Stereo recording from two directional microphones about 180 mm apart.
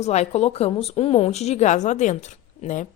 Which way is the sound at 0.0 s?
40° left (ahead or behind).